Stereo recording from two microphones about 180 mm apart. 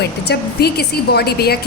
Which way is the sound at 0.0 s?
65° left (ahead or behind).